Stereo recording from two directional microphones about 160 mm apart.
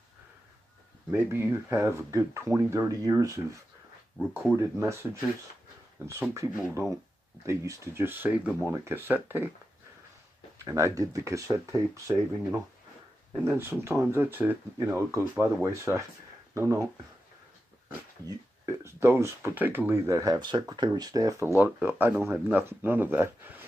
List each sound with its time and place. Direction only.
1.1 s speech: 15° right (ahead or behind)
4.6 s speech: 20° right (ahead or behind)
6.0 s speech: 15° right (ahead or behind)
10.6 s speech: 20° right (ahead or behind)
18.7 s speech: 15° right (ahead or behind)